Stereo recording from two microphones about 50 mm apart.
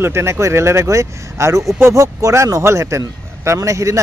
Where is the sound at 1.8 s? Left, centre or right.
Right.